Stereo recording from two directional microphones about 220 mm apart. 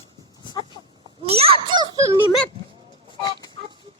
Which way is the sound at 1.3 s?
25° right (ahead or behind).